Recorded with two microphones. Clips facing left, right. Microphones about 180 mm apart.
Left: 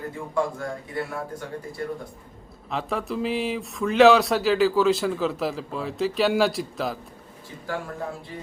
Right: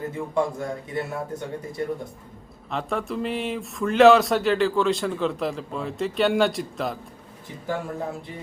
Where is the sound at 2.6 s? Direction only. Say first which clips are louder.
Even; centre (ahead or behind).